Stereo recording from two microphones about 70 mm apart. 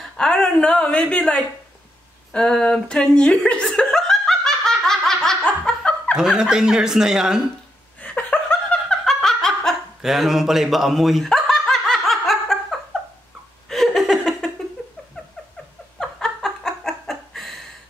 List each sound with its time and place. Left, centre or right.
0.2 s a woman's voice: centre
3.9 s laughter: centre
6.1 s speech: centre
8.0 s laughter: centre
9.0 s snicker: centre
10.0 s speech: centre
11.7 s laughter: centre
13.7 s laughter: centre
15.2 s cat: centre
16.0 s laughter: centre